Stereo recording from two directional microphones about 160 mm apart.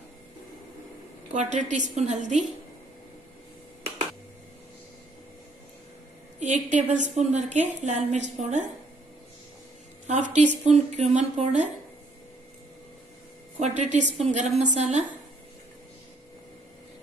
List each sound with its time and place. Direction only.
1.3 s a woman's voice: 45° right (ahead or behind)
6.4 s a woman's voice: 50° right (ahead or behind)
10.3 s a woman's voice: 45° right (ahead or behind)
13.6 s a woman's voice: 50° right (ahead or behind)